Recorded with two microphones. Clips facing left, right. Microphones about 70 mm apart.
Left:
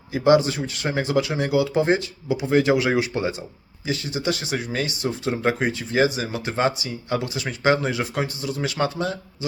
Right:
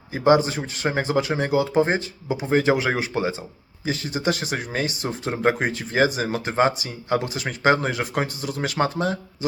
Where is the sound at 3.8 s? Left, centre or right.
Right.